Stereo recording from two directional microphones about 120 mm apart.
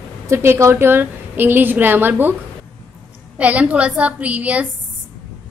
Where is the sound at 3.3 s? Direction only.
10° right (ahead or behind).